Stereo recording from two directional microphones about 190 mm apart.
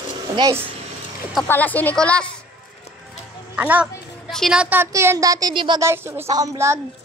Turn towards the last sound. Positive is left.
turn(degrees=-15)  # may be behind; listen again after turning